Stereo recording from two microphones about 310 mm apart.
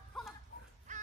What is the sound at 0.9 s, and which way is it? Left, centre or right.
Crow, right.